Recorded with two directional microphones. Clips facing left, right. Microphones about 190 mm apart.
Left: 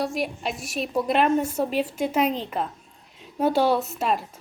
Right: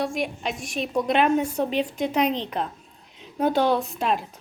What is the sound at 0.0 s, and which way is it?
A woman's voice, 5° left (ahead or behind).